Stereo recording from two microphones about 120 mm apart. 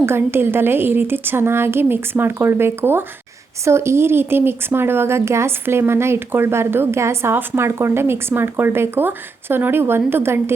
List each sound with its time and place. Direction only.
0.0 s speech: 20° right (ahead or behind)